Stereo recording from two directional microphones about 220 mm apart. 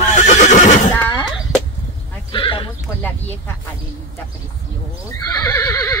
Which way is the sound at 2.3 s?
25° left (ahead or behind).